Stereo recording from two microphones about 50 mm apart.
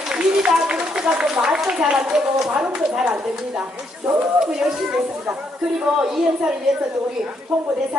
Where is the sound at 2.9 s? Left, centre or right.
Centre.